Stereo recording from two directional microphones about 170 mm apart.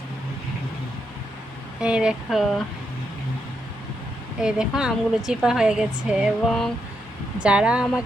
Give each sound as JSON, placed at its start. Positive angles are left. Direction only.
{"t": 1.8, "sound": "a woman's voice", "side_deg": -5}
{"t": 4.4, "sound": "a woman's voice", "side_deg": -5}